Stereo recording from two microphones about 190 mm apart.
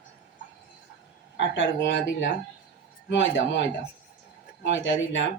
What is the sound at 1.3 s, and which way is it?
Speech, 75° left (ahead or behind).